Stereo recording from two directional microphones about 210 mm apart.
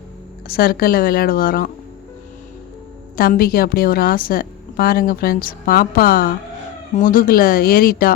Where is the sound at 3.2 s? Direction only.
45° left (ahead or behind).